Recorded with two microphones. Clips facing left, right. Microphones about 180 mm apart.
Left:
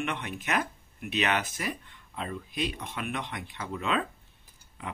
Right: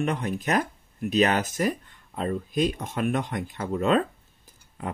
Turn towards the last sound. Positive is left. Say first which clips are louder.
# right 6 dB
turn(degrees=-45)  # may be behind; listen again after turning